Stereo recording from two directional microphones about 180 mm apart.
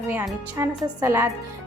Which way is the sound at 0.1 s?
10° right (ahead or behind).